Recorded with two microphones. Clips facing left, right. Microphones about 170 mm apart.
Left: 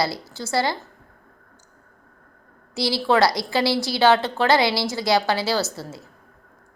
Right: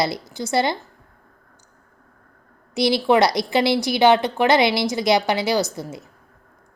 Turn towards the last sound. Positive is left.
turn(degrees=-20)  # may be behind; listen again after turning